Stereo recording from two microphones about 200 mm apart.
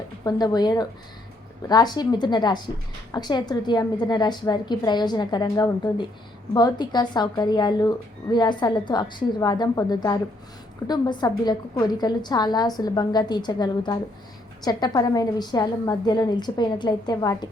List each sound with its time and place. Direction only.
0.3 s speech: 20° left (ahead or behind)